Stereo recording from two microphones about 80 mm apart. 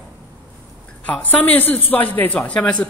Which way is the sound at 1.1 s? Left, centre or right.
Centre.